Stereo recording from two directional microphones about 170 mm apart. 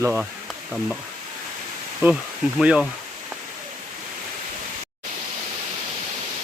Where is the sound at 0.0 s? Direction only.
5° right (ahead or behind).